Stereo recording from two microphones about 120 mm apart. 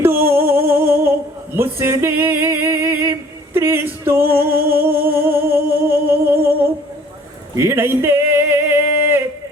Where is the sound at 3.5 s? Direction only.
20° right (ahead or behind).